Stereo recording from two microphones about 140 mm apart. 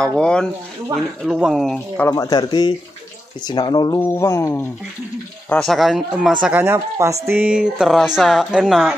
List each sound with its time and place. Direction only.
0.0 s a woman's voice: 5° left (ahead or behind)
2.0 s speech: 15° left (ahead or behind)
2.2 s speech: 30° left (ahead or behind)
5.5 s a woman's voice: centre (ahead or behind)